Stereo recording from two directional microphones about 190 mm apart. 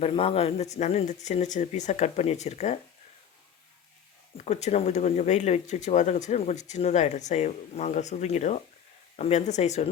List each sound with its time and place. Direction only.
0.0 s speech: 30° left (ahead or behind)
4.4 s speech: 35° left (ahead or behind)